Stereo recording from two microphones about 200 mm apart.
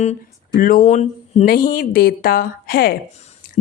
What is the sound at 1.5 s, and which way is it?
A woman's voice, 45° left (ahead or behind).